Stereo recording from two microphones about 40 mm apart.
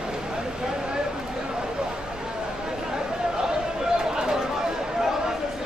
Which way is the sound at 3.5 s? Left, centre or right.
Centre.